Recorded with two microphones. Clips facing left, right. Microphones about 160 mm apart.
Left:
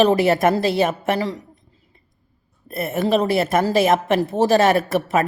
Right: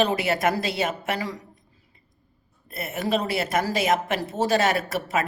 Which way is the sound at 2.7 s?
55° left (ahead or behind).